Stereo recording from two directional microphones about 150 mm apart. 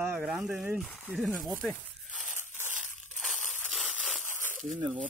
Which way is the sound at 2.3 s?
15° right (ahead or behind).